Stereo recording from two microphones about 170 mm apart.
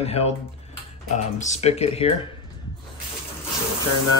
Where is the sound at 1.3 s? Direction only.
45° left (ahead or behind).